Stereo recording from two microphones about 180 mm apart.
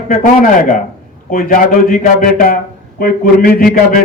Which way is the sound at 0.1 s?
50° left (ahead or behind).